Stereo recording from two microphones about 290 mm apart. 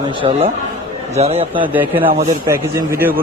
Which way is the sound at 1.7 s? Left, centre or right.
Centre.